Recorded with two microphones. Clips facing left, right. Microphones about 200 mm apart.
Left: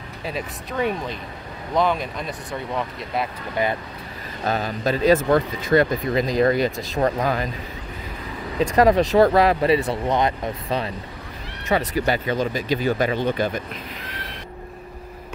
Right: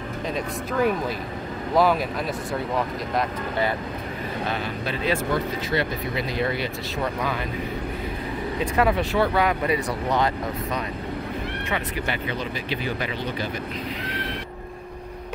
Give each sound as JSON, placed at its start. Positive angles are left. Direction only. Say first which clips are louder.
{"t": 0.3, "sound": "speech", "louder": "right 1 dB", "side_deg": 0}
{"t": 4.5, "sound": "speech", "louder": "left 9 dB", "side_deg": 40}
{"t": 8.7, "sound": "speech", "louder": "left 7 dB", "side_deg": 40}
{"t": 10.0, "sound": "speech", "louder": "left 2 dB", "side_deg": 20}
{"t": 11.7, "sound": "speech", "louder": "left 9 dB", "side_deg": 40}